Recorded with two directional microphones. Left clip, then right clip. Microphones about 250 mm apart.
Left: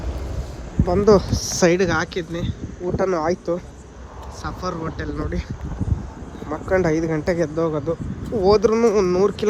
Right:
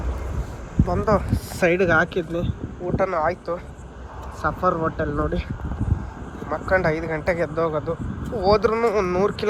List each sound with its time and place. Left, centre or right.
0.9 s speech: left
1.5 s speech: centre
4.4 s speech: centre
6.5 s speech: centre
7.7 s speech: left
8.4 s speech: centre